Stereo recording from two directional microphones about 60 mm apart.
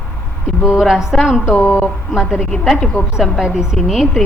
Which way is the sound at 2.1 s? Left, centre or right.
Centre.